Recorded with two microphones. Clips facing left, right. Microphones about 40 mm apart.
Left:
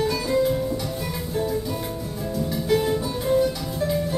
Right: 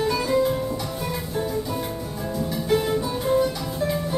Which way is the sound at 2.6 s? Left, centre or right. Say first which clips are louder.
Even; centre.